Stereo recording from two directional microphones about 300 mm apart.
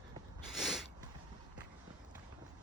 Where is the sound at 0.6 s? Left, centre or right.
Centre.